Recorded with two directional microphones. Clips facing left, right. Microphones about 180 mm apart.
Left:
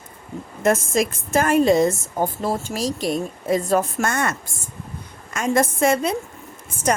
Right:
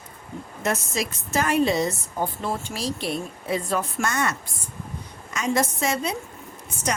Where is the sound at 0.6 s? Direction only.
50° left (ahead or behind).